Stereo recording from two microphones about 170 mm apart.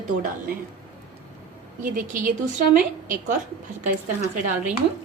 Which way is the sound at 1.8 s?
55° right (ahead or behind).